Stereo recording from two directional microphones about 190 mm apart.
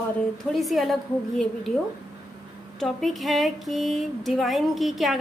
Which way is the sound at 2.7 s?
Centre (ahead or behind).